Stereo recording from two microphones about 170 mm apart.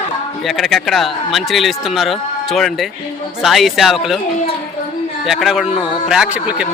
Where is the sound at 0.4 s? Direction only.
Centre (ahead or behind).